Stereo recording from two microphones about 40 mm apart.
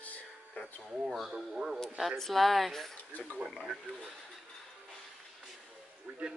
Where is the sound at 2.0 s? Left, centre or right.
Centre.